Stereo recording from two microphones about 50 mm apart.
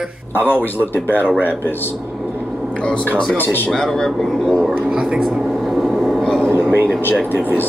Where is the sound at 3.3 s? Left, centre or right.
Left.